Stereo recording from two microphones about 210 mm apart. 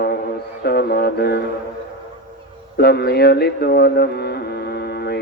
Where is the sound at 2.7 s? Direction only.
50° left (ahead or behind).